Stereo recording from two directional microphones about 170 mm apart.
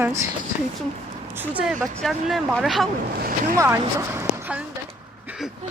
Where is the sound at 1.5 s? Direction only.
10° right (ahead or behind).